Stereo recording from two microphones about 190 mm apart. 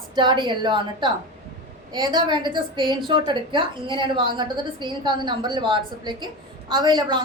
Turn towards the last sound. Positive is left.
turn(degrees=-25)  # may be behind; listen again after turning